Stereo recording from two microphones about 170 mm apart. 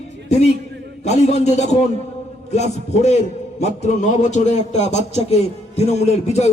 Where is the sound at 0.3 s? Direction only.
40° left (ahead or behind).